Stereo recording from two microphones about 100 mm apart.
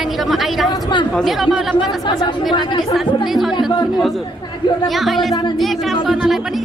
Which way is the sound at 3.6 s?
45° left (ahead or behind).